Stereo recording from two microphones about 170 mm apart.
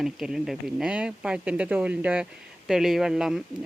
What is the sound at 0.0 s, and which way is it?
Speech, centre (ahead or behind).